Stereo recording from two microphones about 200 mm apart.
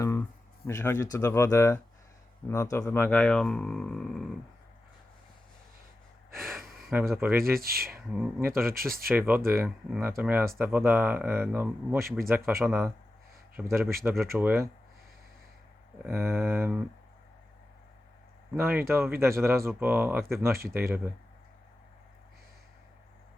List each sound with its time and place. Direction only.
0.0 s a sound: 15° left (ahead or behind)
0.7 s speech: 10° left (ahead or behind)
6.3 s speech: centre (ahead or behind)
7.4 s speech: 50° right (ahead or behind)
7.9 s speech: 5° right (ahead or behind)
8.7 s speech: 45° right (ahead or behind)
9.1 s speech: 10° right (ahead or behind)
16.0 s speech: 10° right (ahead or behind)
18.5 s speech: 10° right (ahead or behind)